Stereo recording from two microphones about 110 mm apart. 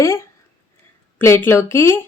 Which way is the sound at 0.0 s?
30° left (ahead or behind).